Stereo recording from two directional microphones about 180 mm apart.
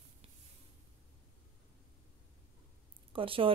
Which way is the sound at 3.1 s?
30° right (ahead or behind).